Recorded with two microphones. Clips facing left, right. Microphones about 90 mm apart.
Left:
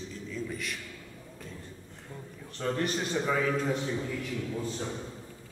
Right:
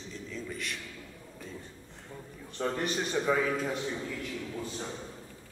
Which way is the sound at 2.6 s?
15° right (ahead or behind).